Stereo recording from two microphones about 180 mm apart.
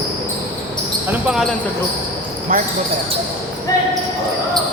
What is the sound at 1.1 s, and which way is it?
Speech, 5° right (ahead or behind).